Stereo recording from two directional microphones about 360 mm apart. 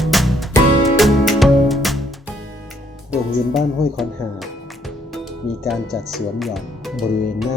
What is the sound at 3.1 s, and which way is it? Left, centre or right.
Music, centre.